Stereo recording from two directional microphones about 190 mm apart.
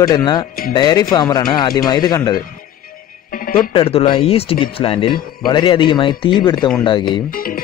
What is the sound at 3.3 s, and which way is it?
Music, 45° left (ahead or behind).